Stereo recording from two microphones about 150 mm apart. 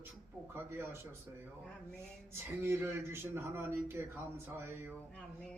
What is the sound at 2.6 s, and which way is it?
Speech, 15° right (ahead or behind).